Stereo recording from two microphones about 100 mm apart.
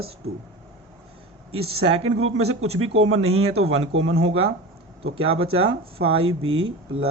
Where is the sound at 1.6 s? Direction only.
75° right (ahead or behind).